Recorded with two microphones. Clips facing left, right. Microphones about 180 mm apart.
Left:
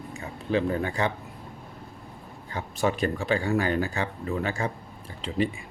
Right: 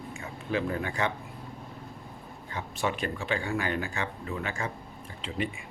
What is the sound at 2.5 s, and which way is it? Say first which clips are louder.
Speech: left 5 dB; 40° left (ahead or behind).